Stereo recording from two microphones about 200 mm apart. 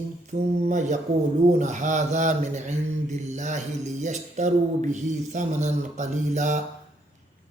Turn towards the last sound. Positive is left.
turn(degrees=-35)  # may be behind; listen again after turning